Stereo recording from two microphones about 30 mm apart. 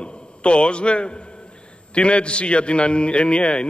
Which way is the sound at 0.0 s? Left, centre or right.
Left.